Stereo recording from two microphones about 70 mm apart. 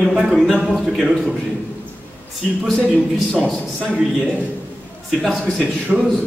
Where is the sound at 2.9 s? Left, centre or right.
Centre.